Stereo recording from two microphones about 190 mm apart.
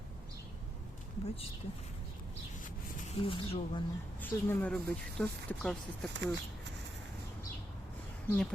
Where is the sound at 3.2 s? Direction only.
30° left (ahead or behind).